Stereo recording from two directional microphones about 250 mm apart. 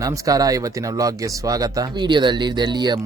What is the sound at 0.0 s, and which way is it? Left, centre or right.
Speech, centre.